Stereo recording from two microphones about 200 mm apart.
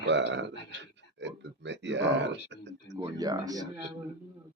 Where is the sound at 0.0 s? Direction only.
60° right (ahead or behind).